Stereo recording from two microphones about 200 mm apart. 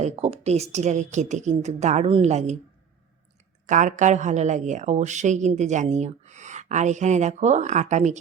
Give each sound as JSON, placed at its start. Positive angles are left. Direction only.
{"t": 0.0, "sound": "a woman's voice", "side_deg": -35}
{"t": 3.7, "sound": "a woman's voice", "side_deg": -40}